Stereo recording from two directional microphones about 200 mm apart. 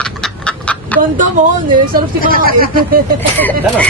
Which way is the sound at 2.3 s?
45° right (ahead or behind).